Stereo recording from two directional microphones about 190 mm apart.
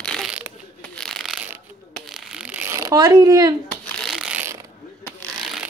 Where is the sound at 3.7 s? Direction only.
5° left (ahead or behind); by 4.6 s 10° right (ahead or behind).